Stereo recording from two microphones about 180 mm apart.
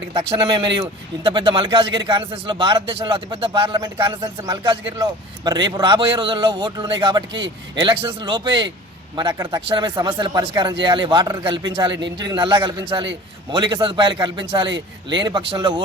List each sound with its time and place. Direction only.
0.1 s a man's voice: 30° right (ahead or behind)